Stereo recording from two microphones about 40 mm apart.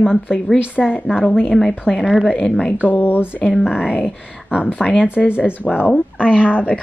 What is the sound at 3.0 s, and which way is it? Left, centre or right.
Speech, left.